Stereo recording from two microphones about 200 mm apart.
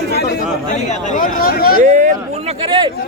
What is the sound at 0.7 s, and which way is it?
Speech, 40° left (ahead or behind).